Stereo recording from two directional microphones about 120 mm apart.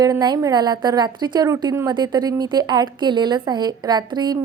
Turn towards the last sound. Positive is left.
turn(degrees=-35)  # may be behind; listen again after turning